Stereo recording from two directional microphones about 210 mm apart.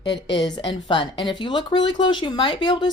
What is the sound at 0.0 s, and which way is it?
Speech, 20° left (ahead or behind).